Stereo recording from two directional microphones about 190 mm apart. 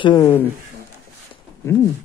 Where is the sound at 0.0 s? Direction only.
20° left (ahead or behind).